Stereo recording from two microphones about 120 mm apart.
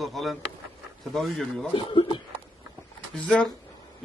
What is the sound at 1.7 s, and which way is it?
Speech, 45° left (ahead or behind).